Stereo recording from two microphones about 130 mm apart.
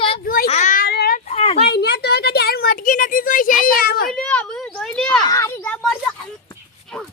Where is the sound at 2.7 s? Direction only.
90° left.